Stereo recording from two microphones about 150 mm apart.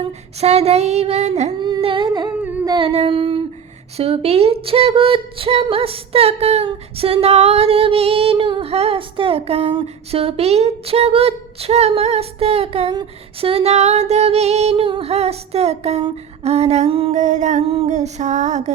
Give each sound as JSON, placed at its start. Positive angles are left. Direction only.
{"t": 0.3, "sound": "female singing", "side_deg": -45}
{"t": 1.5, "sound": "humming", "side_deg": -30}
{"t": 2.4, "sound": "humming", "side_deg": -10}
{"t": 2.6, "sound": "female singing", "side_deg": -35}
{"t": 17.2, "sound": "female singing", "side_deg": -50}